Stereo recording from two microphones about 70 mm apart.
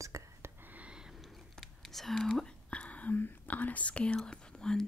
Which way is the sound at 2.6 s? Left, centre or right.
Centre.